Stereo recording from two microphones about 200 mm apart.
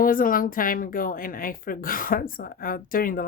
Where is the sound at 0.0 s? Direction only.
45° left (ahead or behind).